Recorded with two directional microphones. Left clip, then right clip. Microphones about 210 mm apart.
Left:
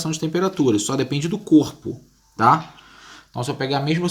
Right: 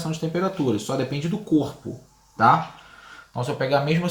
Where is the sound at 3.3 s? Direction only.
45° left (ahead or behind).